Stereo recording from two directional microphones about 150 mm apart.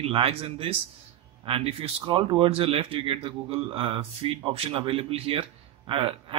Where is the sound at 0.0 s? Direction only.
40° right (ahead or behind).